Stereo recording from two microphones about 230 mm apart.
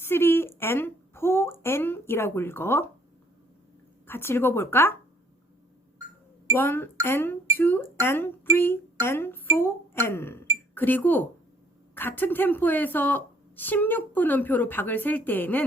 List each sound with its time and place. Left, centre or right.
0.0 s a woman's voice: centre
4.0 s a woman's voice: centre
6.6 s a woman's voice: centre